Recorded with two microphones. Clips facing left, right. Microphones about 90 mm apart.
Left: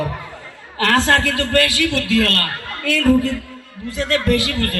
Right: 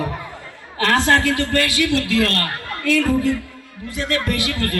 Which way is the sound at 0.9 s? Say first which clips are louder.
Even; 20° right (ahead or behind).